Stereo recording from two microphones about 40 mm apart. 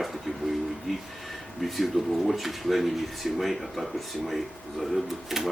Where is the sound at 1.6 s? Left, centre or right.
Centre.